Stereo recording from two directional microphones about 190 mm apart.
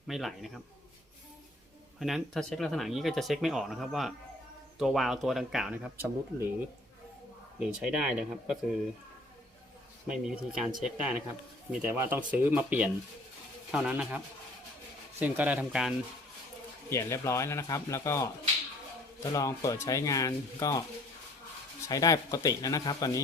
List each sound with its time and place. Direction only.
0.1 s speech: centre (ahead or behind)
2.0 s speech: centre (ahead or behind)
7.6 s speech: 5° right (ahead or behind)
10.1 s speech: 5° right (ahead or behind)
15.2 s speech: 10° right (ahead or behind)
16.9 s speech: 15° left (ahead or behind)